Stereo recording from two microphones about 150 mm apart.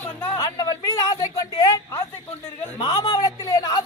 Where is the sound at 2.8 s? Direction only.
25° left (ahead or behind).